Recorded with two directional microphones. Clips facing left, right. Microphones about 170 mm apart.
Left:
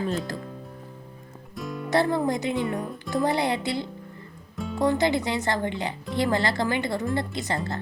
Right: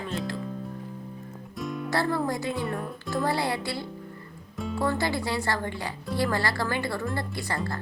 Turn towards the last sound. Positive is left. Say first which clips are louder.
# left 2 dB
turn(degrees=20)  # may be behind; listen again after turning